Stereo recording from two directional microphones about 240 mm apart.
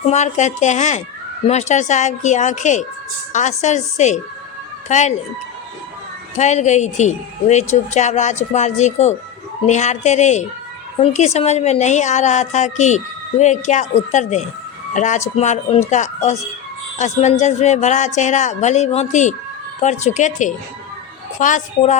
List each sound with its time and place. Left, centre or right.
0.1 s a woman's voice: left
6.3 s a woman's voice: left